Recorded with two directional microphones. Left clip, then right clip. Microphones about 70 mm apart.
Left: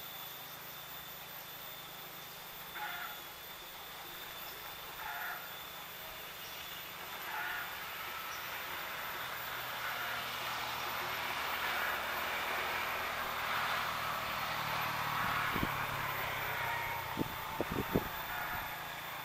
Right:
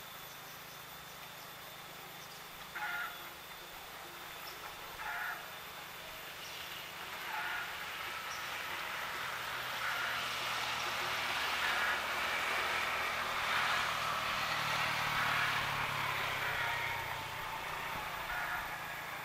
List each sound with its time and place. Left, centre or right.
8.5 s vehicle: right
17.8 s vehicle: right